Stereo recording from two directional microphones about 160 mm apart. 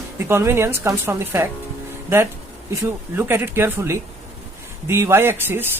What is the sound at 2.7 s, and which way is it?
Speech, 15° right (ahead or behind).